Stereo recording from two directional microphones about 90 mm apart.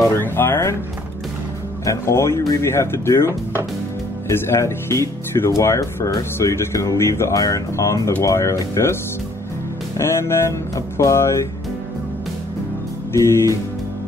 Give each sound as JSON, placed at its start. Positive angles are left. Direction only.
{"t": 0.0, "sound": "speech", "side_deg": 25}
{"t": 1.9, "sound": "speech", "side_deg": 30}
{"t": 9.9, "sound": "music", "side_deg": 30}
{"t": 11.0, "sound": "speech", "side_deg": 35}
{"t": 13.1, "sound": "speech", "side_deg": 30}